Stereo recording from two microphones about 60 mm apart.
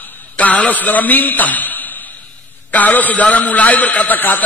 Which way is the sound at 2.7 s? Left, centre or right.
Left.